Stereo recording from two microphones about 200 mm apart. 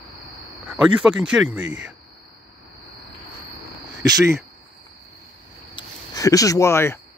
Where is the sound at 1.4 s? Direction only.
70° right (ahead or behind).